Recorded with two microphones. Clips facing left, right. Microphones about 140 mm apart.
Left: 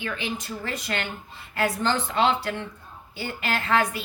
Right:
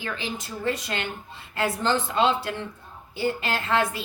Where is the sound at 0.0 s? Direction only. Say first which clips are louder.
Left 1 dB; 30° right (ahead or behind).